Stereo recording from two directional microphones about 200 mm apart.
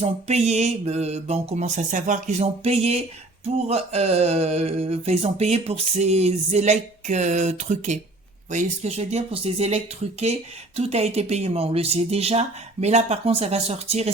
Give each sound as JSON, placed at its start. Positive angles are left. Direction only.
{"t": 0.0, "sound": "speech", "side_deg": -35}